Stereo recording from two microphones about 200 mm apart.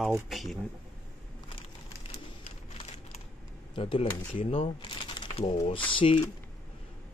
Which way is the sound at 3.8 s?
25° left (ahead or behind).